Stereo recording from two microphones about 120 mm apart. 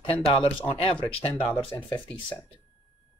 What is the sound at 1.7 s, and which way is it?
Speech, 30° left (ahead or behind).